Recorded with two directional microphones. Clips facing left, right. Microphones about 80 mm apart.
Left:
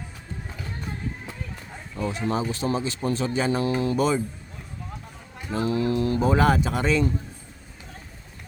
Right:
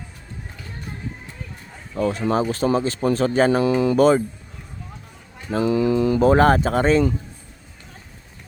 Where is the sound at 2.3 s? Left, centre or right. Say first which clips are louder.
Right 6 dB; right.